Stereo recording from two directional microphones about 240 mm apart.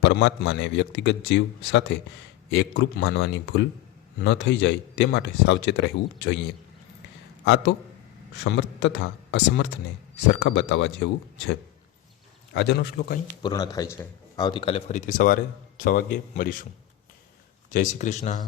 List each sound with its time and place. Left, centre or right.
0.0 s speech: left
7.4 s speech: left
12.5 s speech: left
13.4 s a man's voice: centre; by 16.6 s left
17.7 s a man's voice: left